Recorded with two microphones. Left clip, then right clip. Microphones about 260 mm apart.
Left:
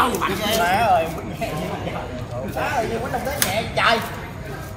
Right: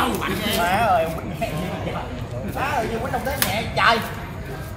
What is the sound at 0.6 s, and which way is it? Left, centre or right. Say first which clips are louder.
Speech: left 1 dB; centre.